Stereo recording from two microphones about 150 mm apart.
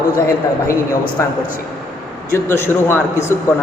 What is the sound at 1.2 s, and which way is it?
A man's voice, 15° left (ahead or behind).